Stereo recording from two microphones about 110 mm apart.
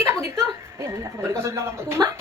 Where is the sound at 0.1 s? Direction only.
25° right (ahead or behind).